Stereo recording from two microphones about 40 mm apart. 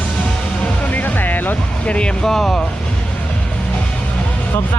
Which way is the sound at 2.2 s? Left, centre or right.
Centre.